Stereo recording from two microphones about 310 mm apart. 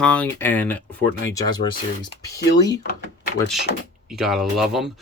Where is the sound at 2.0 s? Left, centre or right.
Centre.